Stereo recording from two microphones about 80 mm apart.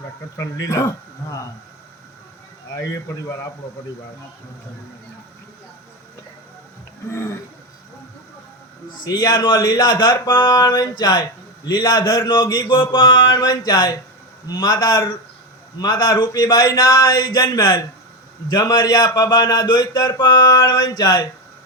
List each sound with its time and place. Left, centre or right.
0.3 s a man's voice: left
2.8 s a man's voice: left
7.1 s a man's voice: left
9.0 s speech: left
12.6 s mantra: left
13.4 s a man's voice: left
20.7 s speech: left